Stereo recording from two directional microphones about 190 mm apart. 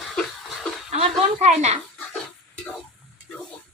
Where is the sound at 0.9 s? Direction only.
35° right (ahead or behind).